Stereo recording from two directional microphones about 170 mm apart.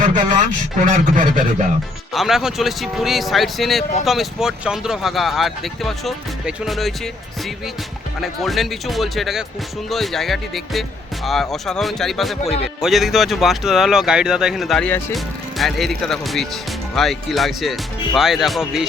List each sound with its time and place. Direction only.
0.0 s speech: 50° right (ahead or behind)
2.1 s speech: centre (ahead or behind)